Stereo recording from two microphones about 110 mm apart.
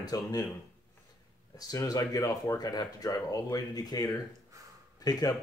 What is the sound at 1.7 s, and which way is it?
Speech, 30° left (ahead or behind).